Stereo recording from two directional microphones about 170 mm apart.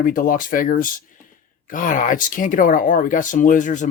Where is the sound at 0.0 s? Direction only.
55° left (ahead or behind).